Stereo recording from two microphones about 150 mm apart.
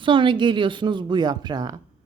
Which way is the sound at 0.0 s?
35° right (ahead or behind).